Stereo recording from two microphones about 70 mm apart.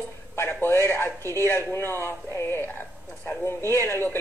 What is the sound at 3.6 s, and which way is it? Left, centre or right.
Speech, left.